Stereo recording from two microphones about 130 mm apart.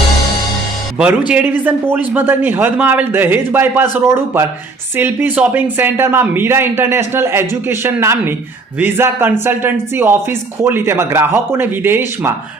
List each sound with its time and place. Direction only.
1.3 s speech: 10° right (ahead or behind)